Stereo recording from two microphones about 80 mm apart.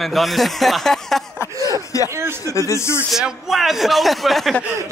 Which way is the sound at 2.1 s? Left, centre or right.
Right.